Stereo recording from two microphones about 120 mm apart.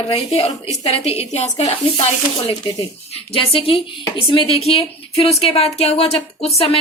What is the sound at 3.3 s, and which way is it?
A woman's voice, 50° left (ahead or behind).